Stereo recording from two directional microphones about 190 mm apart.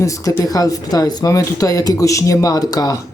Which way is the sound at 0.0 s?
15° left (ahead or behind).